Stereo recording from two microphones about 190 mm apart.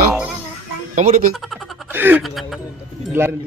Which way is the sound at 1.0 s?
45° right (ahead or behind).